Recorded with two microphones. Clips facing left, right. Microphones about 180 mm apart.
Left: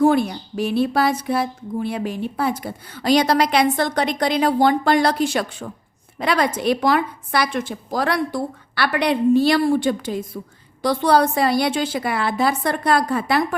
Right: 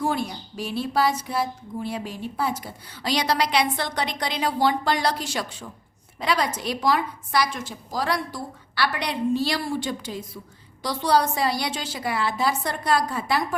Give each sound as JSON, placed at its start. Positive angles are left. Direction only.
{"t": 0.0, "sound": "speech", "side_deg": 60}